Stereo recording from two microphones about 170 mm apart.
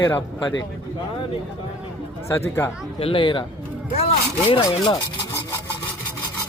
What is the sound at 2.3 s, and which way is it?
Speech, 15° left (ahead or behind).